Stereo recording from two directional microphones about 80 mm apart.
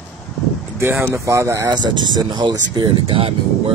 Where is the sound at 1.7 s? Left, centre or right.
Right.